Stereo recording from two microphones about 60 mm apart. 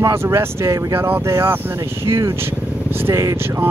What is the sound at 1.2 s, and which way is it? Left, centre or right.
Speech, right.